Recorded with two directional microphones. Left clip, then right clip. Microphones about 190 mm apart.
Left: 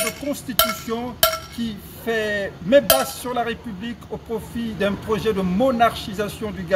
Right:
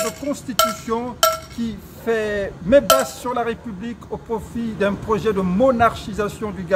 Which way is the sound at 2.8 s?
Centre (ahead or behind).